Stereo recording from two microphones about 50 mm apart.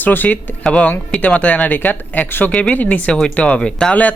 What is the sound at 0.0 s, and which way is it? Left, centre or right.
Speech, left.